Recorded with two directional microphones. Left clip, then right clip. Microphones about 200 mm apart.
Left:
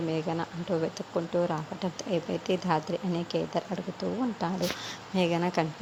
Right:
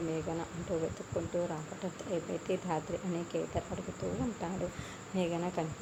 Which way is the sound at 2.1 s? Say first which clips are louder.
Left 6 dB; 15° left (ahead or behind).